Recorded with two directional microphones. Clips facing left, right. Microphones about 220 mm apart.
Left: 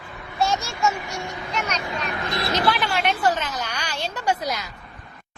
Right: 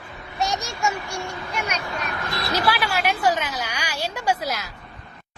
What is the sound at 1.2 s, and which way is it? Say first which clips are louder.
A child's voice: even; 15° left (ahead or behind).